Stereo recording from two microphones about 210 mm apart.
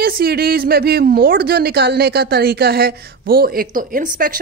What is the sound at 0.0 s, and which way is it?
A woman's voice, 45° right (ahead or behind).